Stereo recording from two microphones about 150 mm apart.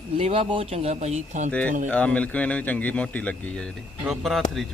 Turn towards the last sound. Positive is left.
turn(degrees=0)  # may be behind; listen again after turning